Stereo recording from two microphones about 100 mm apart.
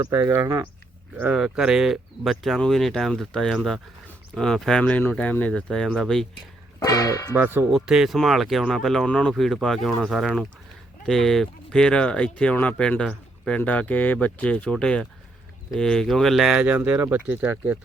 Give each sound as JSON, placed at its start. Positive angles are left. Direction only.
{"t": 0.0, "sound": "speech", "side_deg": -25}
{"t": 6.7, "sound": "speech", "side_deg": 35}
{"t": 7.3, "sound": "speech", "side_deg": -20}
{"t": 7.7, "sound": "speech", "side_deg": -5}
{"t": 16.6, "sound": "speech", "side_deg": -15}